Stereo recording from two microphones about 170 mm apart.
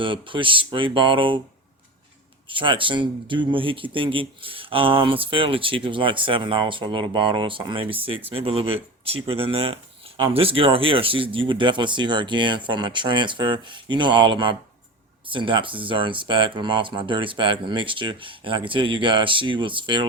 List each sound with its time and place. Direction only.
0.0 s speech: 30° right (ahead or behind)
2.5 s speech: 30° right (ahead or behind)